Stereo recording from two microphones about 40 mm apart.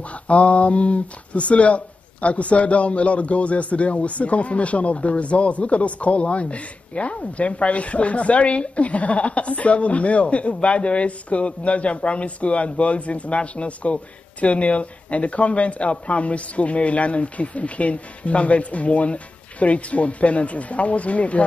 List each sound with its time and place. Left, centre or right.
0.3 s a man's voice: left